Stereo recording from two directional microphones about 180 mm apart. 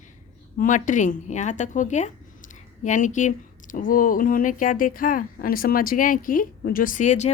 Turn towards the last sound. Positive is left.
turn(degrees=40)  # may be behind; listen again after turning